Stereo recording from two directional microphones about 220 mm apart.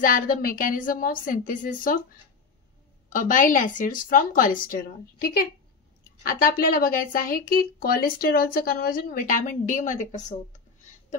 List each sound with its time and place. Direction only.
0.0 s speech: 40° left (ahead or behind)
3.1 s speech: 40° left (ahead or behind)